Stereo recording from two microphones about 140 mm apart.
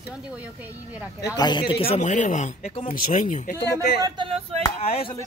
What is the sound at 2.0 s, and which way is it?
Speech, 60° left (ahead or behind).